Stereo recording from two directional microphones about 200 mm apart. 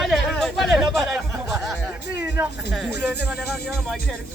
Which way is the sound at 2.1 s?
15° right (ahead or behind).